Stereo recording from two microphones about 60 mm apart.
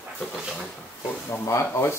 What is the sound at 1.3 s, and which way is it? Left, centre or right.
Speech, left.